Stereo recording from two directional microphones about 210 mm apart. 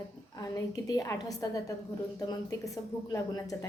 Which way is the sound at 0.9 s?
15° left (ahead or behind).